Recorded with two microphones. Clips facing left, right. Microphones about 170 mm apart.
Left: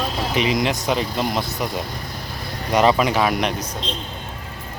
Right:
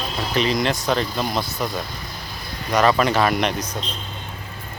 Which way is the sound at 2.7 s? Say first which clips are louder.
Left 1 dB; 20° left (ahead or behind).